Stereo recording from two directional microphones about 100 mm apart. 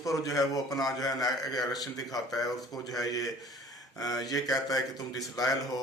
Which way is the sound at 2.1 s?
40° left (ahead or behind).